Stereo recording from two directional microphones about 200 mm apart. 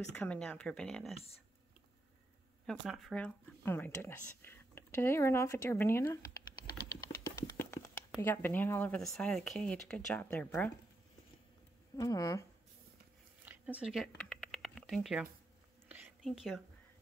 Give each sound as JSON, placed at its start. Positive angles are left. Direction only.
{"t": 0.1, "sound": "speech", "side_deg": 5}
{"t": 2.6, "sound": "speech", "side_deg": 0}
{"t": 7.2, "sound": "a sound", "side_deg": 15}
{"t": 8.2, "sound": "speech", "side_deg": 10}
{"t": 12.0, "sound": "speech", "side_deg": 15}
{"t": 13.5, "sound": "a sound", "side_deg": -5}
{"t": 15.9, "sound": "whispering", "side_deg": -5}